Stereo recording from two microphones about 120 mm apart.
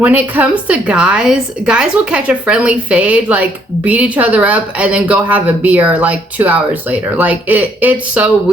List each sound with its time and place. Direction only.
0.0 s a woman's voice: 15° right (ahead or behind)